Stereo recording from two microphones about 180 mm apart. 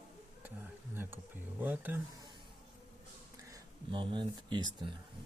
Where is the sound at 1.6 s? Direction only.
10° right (ahead or behind).